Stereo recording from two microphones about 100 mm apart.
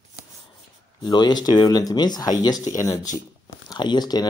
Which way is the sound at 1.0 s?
45° left (ahead or behind).